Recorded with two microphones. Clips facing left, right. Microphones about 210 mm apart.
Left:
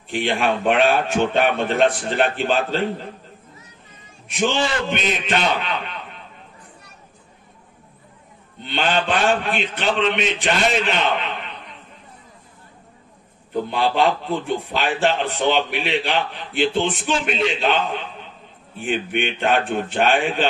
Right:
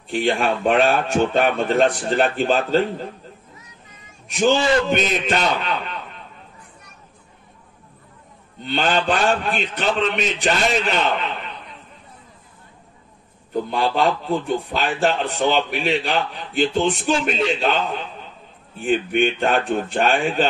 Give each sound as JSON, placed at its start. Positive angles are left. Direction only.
{"t": 0.1, "sound": "a man's voice", "side_deg": -40}
{"t": 4.3, "sound": "a man's voice", "side_deg": -40}
{"t": 8.6, "sound": "a man's voice", "side_deg": -40}
{"t": 13.7, "sound": "a man's voice", "side_deg": -40}